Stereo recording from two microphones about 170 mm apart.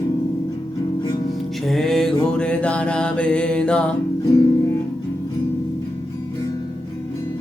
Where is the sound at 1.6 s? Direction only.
Centre (ahead or behind).